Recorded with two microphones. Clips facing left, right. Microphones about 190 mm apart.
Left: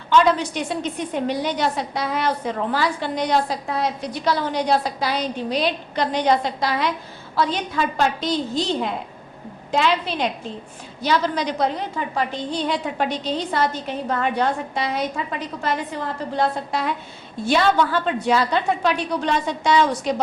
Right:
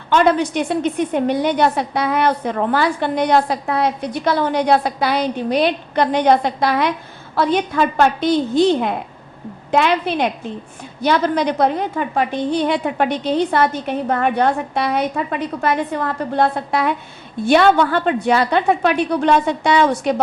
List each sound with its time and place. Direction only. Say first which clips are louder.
0.1 s a woman's voice: right 3 dB; 55° right (ahead or behind)